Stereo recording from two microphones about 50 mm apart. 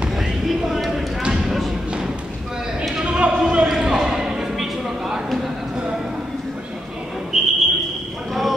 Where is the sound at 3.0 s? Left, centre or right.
Right; by 5.5 s centre.